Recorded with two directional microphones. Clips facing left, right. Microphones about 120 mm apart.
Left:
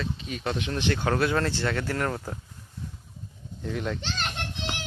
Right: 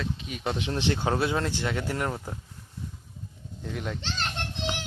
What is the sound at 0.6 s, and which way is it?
Speech, 25° right (ahead or behind).